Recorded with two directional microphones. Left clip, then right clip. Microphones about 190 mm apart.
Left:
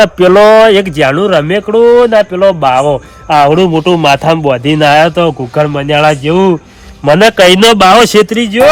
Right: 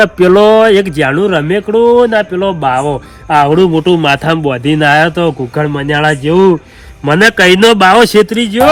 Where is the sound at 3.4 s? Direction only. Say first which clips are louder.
Left 2 dB; 5° left (ahead or behind).